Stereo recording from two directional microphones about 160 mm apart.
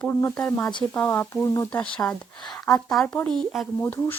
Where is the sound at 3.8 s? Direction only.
10° left (ahead or behind).